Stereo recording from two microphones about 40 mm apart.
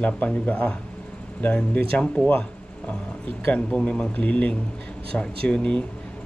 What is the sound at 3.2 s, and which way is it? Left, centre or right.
Speech, left.